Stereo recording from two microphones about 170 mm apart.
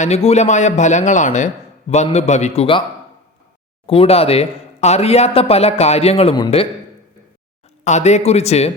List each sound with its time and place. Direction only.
0.0 s a man's voice: 40° left (ahead or behind)
3.8 s speech: 35° left (ahead or behind)
7.9 s speech: 45° left (ahead or behind)